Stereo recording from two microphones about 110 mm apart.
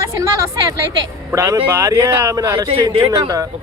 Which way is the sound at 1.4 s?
25° right (ahead or behind).